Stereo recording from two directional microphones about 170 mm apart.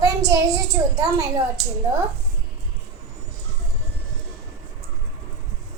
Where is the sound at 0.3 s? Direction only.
20° right (ahead or behind).